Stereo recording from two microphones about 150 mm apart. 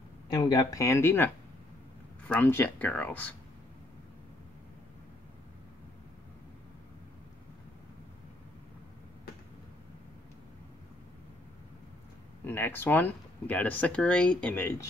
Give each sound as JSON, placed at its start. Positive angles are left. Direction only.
{"t": 0.3, "sound": "speech", "side_deg": 25}
{"t": 12.4, "sound": "speech", "side_deg": 15}